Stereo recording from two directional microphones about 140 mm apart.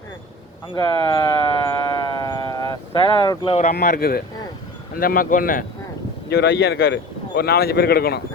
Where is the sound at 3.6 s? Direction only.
80° left.